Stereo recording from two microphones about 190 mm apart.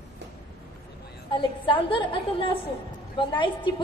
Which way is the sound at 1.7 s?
25° left (ahead or behind).